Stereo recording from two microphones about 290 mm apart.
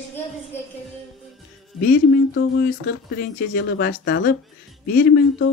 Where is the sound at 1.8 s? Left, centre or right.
Left.